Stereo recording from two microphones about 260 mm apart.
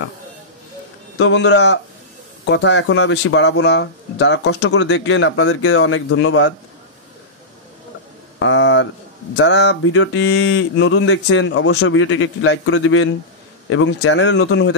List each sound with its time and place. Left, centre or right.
1.1 s speech: left
8.4 s speech: left